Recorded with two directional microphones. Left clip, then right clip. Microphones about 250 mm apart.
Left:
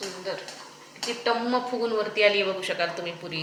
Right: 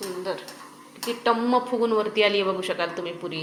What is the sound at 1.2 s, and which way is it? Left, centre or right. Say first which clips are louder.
Speech: right 4 dB; right.